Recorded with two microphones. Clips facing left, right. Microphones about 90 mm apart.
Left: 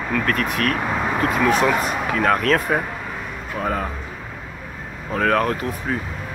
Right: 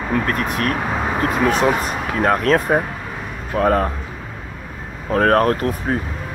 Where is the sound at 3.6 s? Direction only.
50° right (ahead or behind).